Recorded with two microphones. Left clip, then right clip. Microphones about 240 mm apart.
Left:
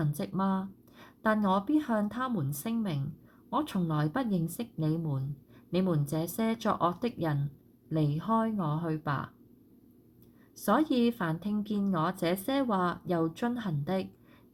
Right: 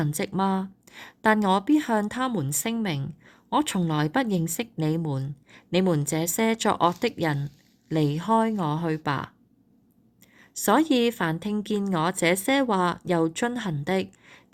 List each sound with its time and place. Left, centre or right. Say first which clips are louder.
0.0 s speech: right 7 dB; right
10.7 s speech: right 6 dB; right